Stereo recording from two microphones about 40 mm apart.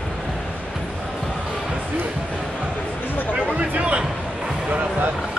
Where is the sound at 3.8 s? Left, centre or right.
Right.